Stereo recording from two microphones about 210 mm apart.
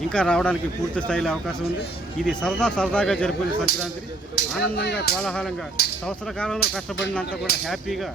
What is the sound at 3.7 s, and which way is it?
Speech, 45° left (ahead or behind).